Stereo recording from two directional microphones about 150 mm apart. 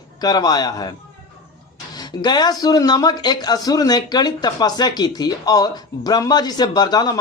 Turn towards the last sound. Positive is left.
turn(degrees=25)  # may be behind; listen again after turning